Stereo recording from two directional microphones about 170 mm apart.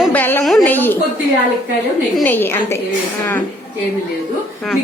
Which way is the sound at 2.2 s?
10° left (ahead or behind).